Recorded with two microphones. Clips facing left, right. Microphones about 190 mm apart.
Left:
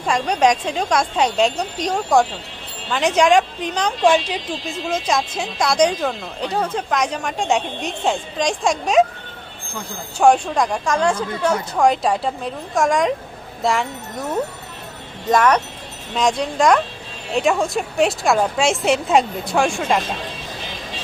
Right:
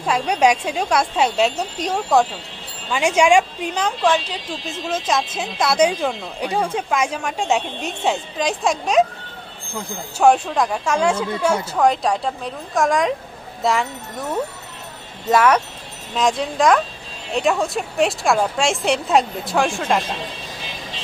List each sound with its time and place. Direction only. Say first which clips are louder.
0.0 s a woman's voice: even; 5° right (ahead or behind)
4.0 s speech: left 4 dB; 15° left (ahead or behind)
5.4 s a woman's voice: even; 5° right (ahead or behind)
10.2 s a woman's voice: left 1 dB; 5° right (ahead or behind)
15.3 s a woman's voice: even; 5° right (ahead or behind)